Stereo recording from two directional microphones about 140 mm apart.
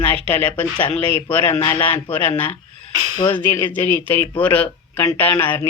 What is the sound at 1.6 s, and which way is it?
Speech, 35° left (ahead or behind).